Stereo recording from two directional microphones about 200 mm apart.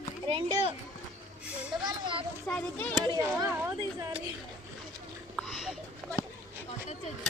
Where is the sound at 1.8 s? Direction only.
25° right (ahead or behind).